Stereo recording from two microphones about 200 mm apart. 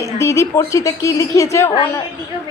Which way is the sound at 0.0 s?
15° left (ahead or behind).